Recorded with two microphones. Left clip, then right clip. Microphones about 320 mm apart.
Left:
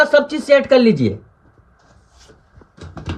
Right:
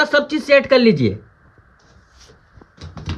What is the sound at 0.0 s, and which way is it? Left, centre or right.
Speech, centre.